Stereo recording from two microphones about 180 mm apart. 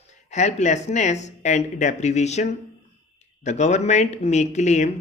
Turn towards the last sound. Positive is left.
turn(degrees=40)  # may be behind; listen again after turning